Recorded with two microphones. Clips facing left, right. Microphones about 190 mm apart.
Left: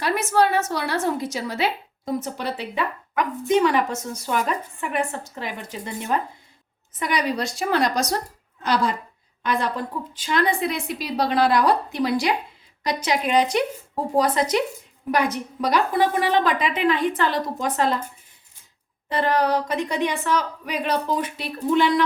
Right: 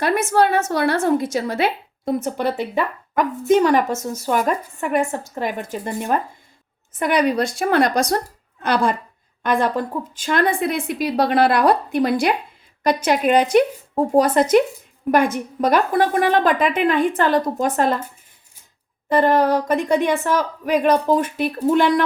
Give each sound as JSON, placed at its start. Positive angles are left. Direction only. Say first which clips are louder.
{"t": 0.0, "sound": "a woman's voice", "louder": "right 3 dB", "side_deg": -55}
{"t": 19.0, "sound": "a woman's voice", "louder": "right 5 dB", "side_deg": -45}